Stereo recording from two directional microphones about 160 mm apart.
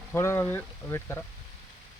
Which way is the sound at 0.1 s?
15° left (ahead or behind).